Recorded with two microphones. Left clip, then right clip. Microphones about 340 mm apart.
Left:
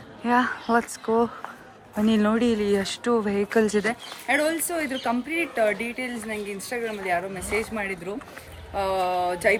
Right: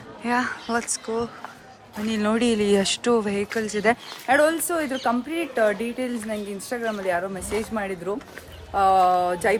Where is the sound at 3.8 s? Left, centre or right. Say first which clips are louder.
Right 6 dB; centre.